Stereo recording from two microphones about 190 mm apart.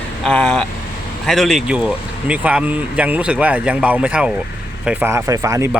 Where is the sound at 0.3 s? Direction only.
5° left (ahead or behind).